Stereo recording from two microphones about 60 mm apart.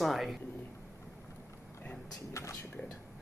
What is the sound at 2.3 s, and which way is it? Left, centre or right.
Speech, left.